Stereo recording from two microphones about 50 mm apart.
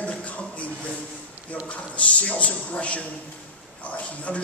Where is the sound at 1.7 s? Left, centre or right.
Left.